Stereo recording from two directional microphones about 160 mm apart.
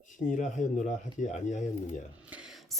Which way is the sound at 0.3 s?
50° left (ahead or behind).